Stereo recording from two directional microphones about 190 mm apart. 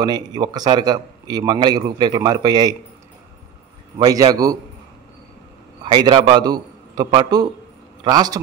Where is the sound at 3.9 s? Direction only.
20° right (ahead or behind).